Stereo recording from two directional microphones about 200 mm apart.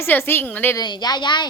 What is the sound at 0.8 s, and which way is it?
Speech, 20° left (ahead or behind).